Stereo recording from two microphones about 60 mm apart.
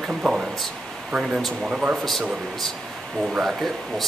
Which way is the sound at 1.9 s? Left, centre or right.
Centre.